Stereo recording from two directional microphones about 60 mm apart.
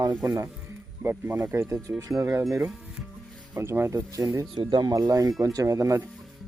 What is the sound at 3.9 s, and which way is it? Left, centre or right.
Speech, right.